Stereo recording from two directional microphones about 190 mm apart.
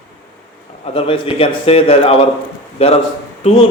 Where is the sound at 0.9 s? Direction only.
30° left (ahead or behind).